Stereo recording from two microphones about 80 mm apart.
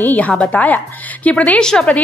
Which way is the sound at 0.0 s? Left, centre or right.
Centre.